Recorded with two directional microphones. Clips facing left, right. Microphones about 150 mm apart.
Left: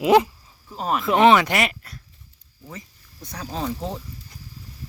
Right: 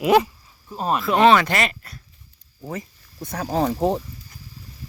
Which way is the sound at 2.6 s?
55° right (ahead or behind).